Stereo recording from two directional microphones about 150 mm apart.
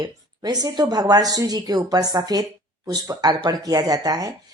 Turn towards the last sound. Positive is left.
turn(degrees=-25)  # may be behind; listen again after turning